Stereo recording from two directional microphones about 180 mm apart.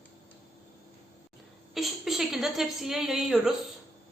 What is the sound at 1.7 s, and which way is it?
A woman's voice, centre (ahead or behind).